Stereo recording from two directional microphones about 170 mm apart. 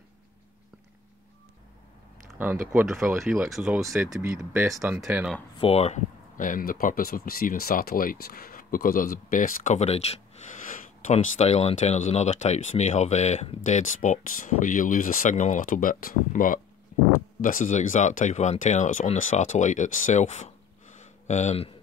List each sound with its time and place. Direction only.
2.7 s speech: 15° right (ahead or behind)
3.3 s speech: 5° right (ahead or behind)
4.2 s speech: 15° right (ahead or behind)
5.6 s speech: 40° left (ahead or behind)